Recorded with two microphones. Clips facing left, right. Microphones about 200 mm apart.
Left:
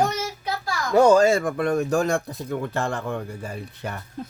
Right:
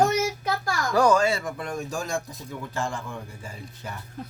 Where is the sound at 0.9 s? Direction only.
25° left (ahead or behind).